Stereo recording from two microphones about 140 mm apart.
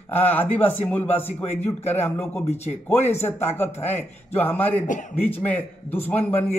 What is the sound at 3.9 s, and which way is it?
Speech, 50° left (ahead or behind).